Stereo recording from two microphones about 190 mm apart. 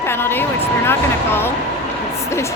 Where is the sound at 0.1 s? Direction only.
10° left (ahead or behind).